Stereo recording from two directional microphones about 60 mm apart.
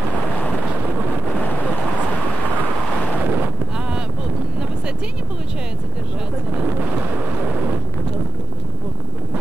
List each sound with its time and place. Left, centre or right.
3.3 s wind noise: right